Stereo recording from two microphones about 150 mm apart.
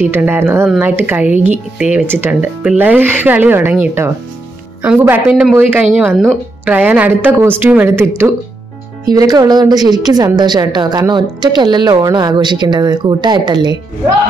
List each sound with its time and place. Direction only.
0.0 s speech: 15° right (ahead or behind)
9.0 s a woman's voice: 25° right (ahead or behind)